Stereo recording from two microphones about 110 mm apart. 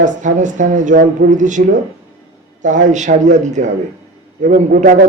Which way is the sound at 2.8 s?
90° right.